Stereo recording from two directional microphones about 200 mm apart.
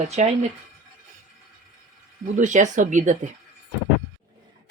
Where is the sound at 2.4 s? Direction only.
40° right (ahead or behind).